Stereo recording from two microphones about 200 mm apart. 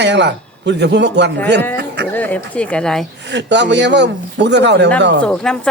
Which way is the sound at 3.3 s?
60° right (ahead or behind).